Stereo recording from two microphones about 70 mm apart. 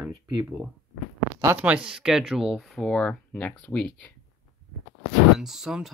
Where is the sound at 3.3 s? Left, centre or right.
Left.